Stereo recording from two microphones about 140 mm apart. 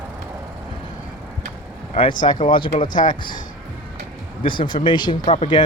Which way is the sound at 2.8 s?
70° left (ahead or behind).